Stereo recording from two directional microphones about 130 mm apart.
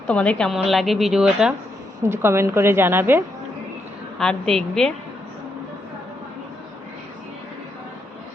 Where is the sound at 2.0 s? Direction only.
20° right (ahead or behind).